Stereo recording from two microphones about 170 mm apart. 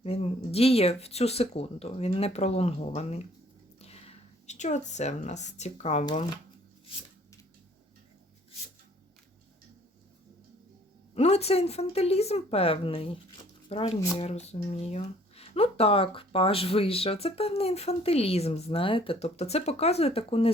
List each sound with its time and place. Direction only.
0.0 s speech: 35° left (ahead or behind)
6.1 s speech: 25° left (ahead or behind)
11.1 s speech: 40° left (ahead or behind)